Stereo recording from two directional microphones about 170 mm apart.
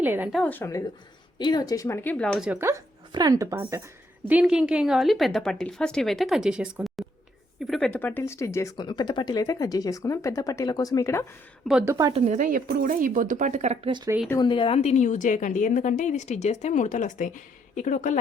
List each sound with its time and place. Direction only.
0.0 s a woman's voice: 10° right (ahead or behind)
0.4 s speech: 10° left (ahead or behind)
2.5 s a woman's voice: 15° right (ahead or behind); by 11.3 s 15° left (ahead or behind)
11.9 s a woman's voice: 20° right (ahead or behind)
12.1 s speech: 45° right (ahead or behind)
14.4 s a woman's voice: 30° left (ahead or behind); by 18.2 s 50° left (ahead or behind)